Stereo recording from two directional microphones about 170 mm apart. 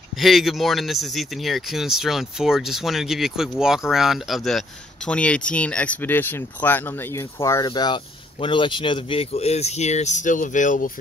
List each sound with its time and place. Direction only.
0.1 s speech: centre (ahead or behind); by 10.9 s 50° left (ahead or behind)